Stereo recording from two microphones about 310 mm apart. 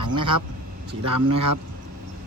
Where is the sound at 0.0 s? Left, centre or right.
Right.